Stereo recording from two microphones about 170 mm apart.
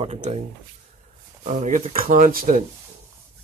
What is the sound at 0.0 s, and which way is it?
Speech, 35° right (ahead or behind).